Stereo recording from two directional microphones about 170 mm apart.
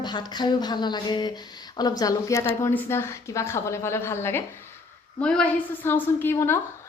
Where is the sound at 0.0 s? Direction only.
25° left (ahead or behind).